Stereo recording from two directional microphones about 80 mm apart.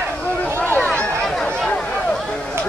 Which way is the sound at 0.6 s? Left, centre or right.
Left.